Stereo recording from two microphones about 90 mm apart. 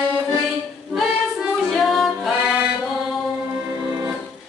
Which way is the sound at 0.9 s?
Centre (ahead or behind).